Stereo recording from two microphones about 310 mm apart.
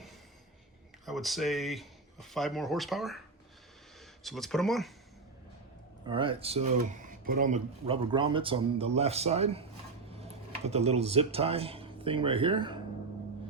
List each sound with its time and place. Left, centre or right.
1.0 s speech: centre
4.2 s speech: centre
6.1 s speech: centre
10.7 s speech: centre